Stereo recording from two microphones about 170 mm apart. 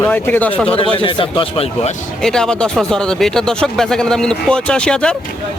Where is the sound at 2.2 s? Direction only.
5° left (ahead or behind).